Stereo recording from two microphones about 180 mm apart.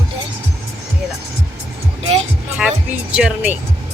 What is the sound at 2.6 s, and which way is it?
Speech, 5° right (ahead or behind).